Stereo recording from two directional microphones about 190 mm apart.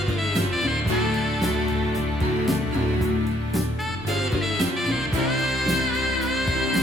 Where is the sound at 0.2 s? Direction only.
Centre (ahead or behind).